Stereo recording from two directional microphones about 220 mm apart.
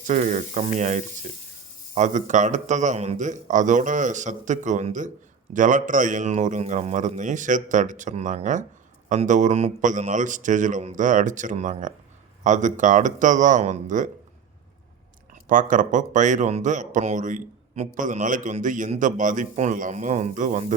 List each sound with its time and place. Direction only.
0.1 s speech: 35° right (ahead or behind)
15.4 s speech: 35° right (ahead or behind)